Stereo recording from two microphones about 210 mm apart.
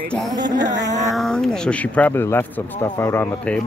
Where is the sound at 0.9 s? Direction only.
35° right (ahead or behind).